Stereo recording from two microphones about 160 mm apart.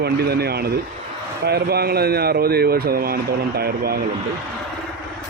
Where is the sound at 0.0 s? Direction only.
80° right.